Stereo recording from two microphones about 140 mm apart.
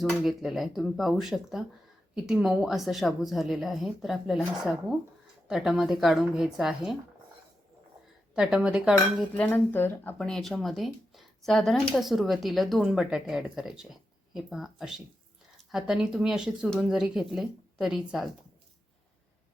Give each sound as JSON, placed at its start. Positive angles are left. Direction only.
{"t": 0.0, "sound": "speech", "side_deg": 0}
{"t": 8.4, "sound": "speech", "side_deg": -5}
{"t": 9.3, "sound": "speech", "side_deg": 15}